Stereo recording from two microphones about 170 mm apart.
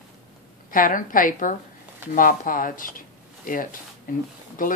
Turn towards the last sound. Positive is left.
turn(degrees=55)  # may be behind; listen again after turning